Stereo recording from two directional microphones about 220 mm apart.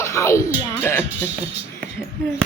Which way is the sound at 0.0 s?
15° left (ahead or behind).